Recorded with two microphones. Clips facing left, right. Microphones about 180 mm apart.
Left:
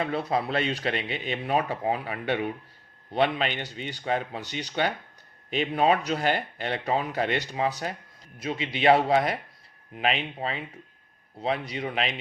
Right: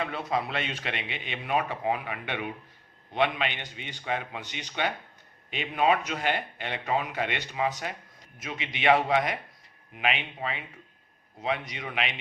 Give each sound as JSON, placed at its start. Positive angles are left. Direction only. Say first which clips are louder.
{"t": 0.0, "sound": "speech", "louder": "left 3 dB", "side_deg": 35}